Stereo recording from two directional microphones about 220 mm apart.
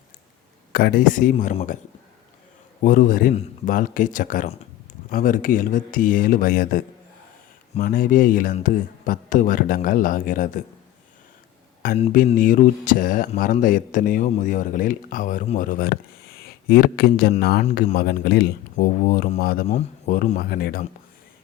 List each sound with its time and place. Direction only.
0.7 s speech: 45° left (ahead or behind)
2.8 s speech: 35° left (ahead or behind)
11.9 s speech: 35° left (ahead or behind)